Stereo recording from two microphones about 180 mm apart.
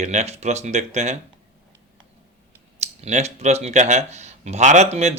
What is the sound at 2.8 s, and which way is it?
Speech, 40° right (ahead or behind).